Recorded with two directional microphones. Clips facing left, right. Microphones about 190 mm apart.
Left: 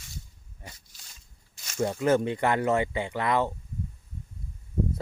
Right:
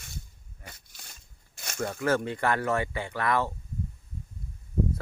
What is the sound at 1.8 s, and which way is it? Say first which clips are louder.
Speech: left 4 dB; 20° left (ahead or behind).